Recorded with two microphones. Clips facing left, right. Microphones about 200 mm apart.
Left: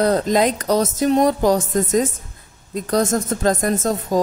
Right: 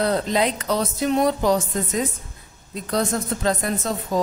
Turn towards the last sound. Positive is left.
turn(degrees=45)  # may be behind; listen again after turning